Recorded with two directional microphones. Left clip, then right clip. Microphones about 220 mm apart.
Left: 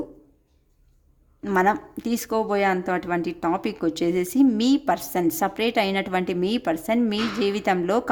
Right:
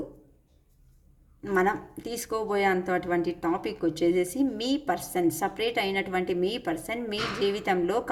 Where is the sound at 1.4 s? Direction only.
45° left (ahead or behind).